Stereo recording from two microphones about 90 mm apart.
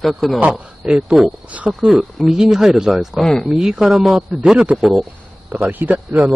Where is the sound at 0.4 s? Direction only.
10° right (ahead or behind).